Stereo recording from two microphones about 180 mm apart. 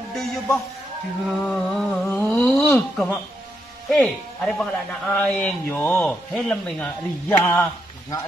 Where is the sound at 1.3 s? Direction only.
Centre (ahead or behind).